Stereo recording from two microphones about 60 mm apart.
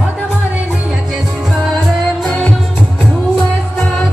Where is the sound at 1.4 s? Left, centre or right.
Centre.